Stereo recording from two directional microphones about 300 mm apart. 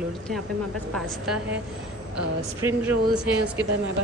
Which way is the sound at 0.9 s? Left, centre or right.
Centre.